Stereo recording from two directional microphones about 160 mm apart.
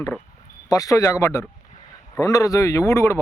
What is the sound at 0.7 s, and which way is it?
Speech, 20° left (ahead or behind).